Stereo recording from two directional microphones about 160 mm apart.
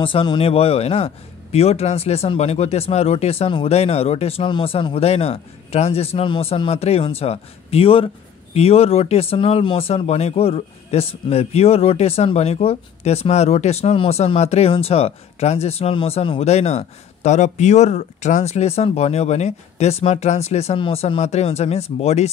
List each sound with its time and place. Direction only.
0.0 s speech: 30° left (ahead or behind)